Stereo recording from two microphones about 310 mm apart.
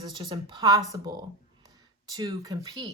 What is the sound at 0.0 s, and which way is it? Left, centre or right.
Speech, centre.